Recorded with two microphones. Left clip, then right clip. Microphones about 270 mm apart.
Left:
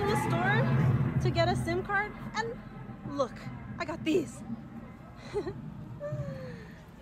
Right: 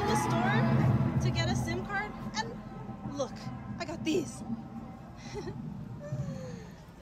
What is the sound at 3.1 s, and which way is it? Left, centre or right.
Music, centre.